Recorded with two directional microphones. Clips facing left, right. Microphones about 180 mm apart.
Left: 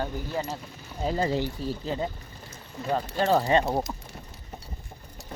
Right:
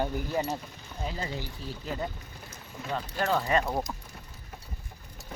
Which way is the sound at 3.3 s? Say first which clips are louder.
Left 5 dB; 30° left (ahead or behind).